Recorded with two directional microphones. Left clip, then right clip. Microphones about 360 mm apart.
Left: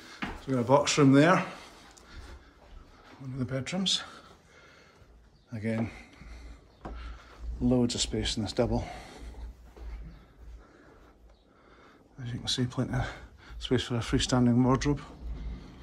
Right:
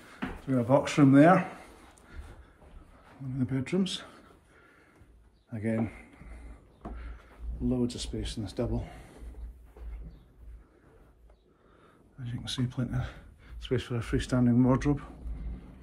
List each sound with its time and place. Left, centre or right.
0.0 s speech: centre
3.3 s speech: centre
5.5 s a sound: centre
7.6 s speech: centre
12.2 s speech: centre